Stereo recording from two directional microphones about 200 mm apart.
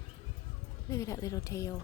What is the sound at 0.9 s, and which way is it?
Speech, 15° left (ahead or behind).